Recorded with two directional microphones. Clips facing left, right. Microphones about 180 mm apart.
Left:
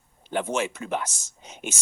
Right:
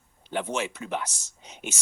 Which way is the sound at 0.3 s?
50° left (ahead or behind).